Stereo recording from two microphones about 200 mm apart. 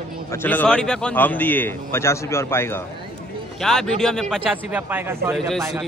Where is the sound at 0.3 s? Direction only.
10° left (ahead or behind); by 5.3 s 10° right (ahead or behind).